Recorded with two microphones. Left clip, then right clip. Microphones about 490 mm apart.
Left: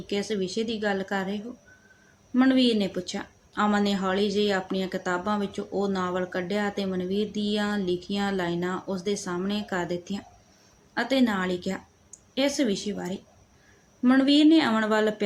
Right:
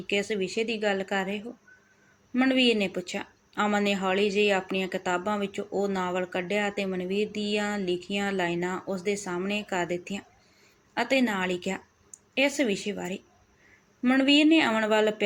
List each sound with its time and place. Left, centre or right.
0.1 s speech: left